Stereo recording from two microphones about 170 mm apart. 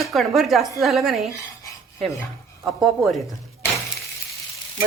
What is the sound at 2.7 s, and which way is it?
Cat, centre (ahead or behind).